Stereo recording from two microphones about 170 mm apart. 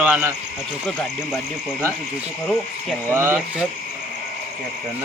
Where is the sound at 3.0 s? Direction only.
15° right (ahead or behind).